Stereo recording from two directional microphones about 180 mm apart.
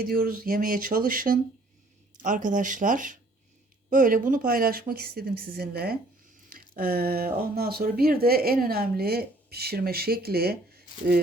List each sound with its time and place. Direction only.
0.0 s speech: 50° right (ahead or behind)